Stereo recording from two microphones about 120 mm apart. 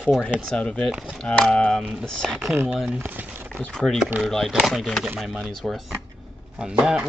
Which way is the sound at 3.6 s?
5° left (ahead or behind).